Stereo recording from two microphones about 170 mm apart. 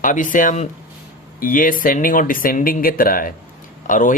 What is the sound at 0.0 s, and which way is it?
Speech, 50° left (ahead or behind).